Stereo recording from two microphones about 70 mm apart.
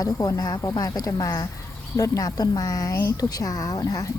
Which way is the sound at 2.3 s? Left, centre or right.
Left.